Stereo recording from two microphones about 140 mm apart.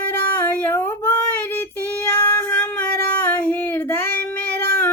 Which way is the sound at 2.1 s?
15° left (ahead or behind).